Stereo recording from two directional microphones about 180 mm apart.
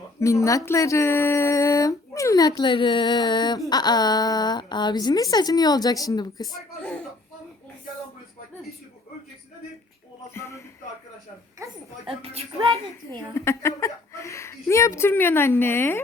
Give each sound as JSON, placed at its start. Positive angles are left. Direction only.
{"t": 0.2, "sound": "speech", "side_deg": 15}
{"t": 10.3, "sound": "speech", "side_deg": 15}
{"t": 11.6, "sound": "a sound", "side_deg": -15}
{"t": 12.2, "sound": "a woman's voice", "side_deg": -35}
{"t": 12.7, "sound": "speech", "side_deg": 15}